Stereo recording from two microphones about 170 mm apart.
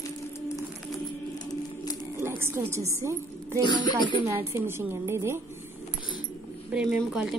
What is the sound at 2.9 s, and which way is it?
Speech, 15° right (ahead or behind).